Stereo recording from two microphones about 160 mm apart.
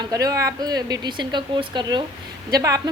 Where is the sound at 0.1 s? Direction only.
20° right (ahead or behind).